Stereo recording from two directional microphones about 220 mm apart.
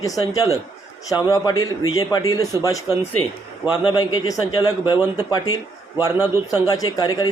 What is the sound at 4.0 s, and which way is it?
Speech, 20° left (ahead or behind).